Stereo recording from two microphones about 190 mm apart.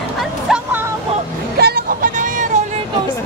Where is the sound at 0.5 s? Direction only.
10° right (ahead or behind).